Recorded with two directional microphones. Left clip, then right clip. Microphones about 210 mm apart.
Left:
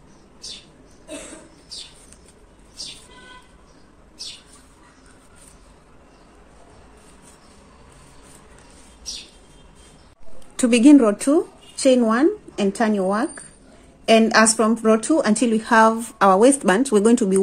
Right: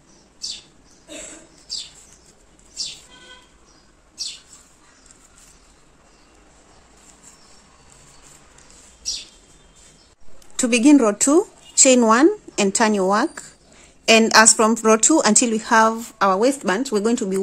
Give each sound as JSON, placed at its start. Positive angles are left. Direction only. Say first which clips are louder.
{"t": 10.5, "sound": "a woman's voice", "louder": "left 2 dB", "side_deg": -10}